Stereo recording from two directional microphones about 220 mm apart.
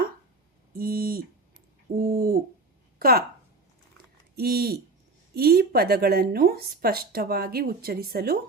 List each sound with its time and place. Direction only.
0.8 s a sound: 40° right (ahead or behind)
2.0 s bird: 40° right (ahead or behind)
3.0 s a woman's voice: 45° right (ahead or behind)
4.4 s speech: 45° right (ahead or behind)